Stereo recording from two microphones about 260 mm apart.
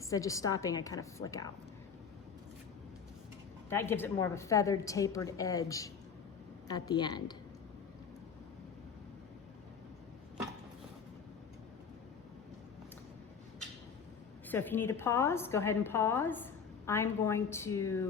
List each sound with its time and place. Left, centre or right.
0.0 s a woman's voice: centre
3.7 s a woman's voice: centre
14.4 s a woman's voice: centre